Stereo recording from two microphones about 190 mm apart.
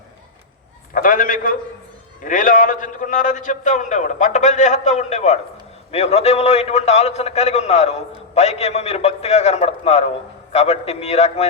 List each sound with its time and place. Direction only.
0.9 s a man's voice: 45° left (ahead or behind)